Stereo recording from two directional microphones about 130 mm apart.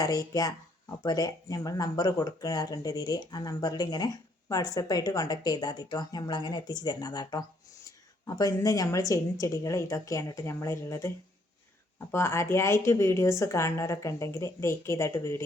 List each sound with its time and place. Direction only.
0.0 s a woman's voice: 30° left (ahead or behind)
12.1 s a woman's voice: 20° left (ahead or behind)